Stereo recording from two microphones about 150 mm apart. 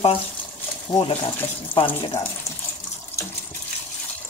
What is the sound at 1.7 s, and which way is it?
Speech, 35° left (ahead or behind).